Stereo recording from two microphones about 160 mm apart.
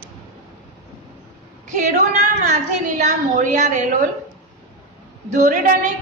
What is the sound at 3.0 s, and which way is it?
Speech, 50° right (ahead or behind).